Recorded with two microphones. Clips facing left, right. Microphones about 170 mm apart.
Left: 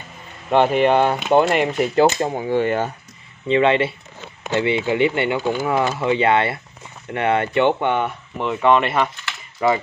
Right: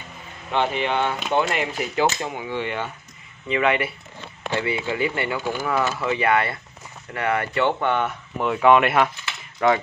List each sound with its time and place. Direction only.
0.5 s speech: 45° left (ahead or behind)
3.4 s speech: 30° left (ahead or behind)
8.0 s speech: centre (ahead or behind)